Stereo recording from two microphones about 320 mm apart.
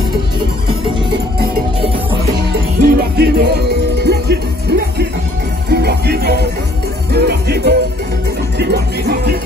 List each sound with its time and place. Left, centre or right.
2.8 s music: right
8.5 s speech: right